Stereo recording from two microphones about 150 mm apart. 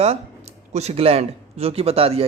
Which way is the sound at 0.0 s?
45° right (ahead or behind).